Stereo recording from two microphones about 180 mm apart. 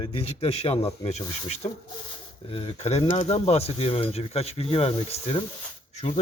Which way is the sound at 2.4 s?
30° left (ahead or behind).